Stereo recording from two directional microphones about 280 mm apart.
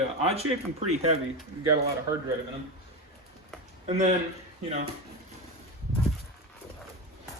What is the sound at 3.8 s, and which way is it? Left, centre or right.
Speech, right.